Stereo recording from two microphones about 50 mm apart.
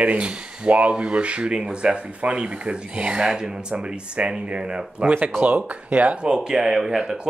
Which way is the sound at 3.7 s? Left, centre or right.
Right.